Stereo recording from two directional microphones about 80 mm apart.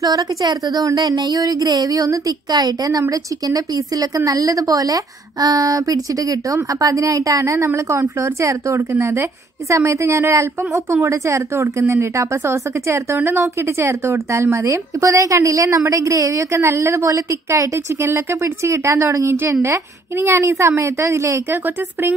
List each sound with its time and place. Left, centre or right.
0.0 s a woman's voice: right